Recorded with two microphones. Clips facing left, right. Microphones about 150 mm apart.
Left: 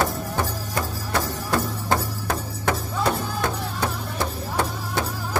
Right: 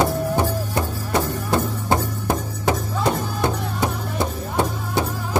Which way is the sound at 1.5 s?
20° right (ahead or behind).